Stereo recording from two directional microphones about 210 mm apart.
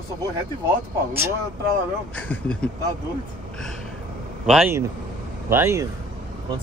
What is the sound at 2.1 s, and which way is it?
Speech, 5° left (ahead or behind).